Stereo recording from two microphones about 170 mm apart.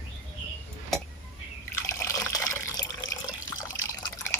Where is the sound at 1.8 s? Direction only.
15° left (ahead or behind).